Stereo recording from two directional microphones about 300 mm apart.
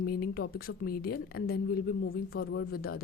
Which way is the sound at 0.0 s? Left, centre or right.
Left.